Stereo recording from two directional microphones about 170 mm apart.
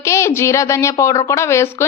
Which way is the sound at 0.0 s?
15° left (ahead or behind).